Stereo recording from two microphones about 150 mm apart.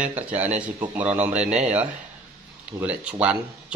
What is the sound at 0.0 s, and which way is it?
Speech, 10° right (ahead or behind).